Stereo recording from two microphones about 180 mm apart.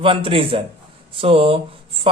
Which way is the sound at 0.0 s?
30° right (ahead or behind).